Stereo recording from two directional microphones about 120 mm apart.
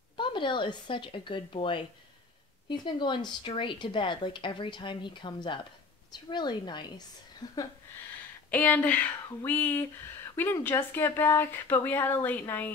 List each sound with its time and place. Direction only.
0.2 s a woman's voice: 40° left (ahead or behind)
8.5 s speech: 15° left (ahead or behind)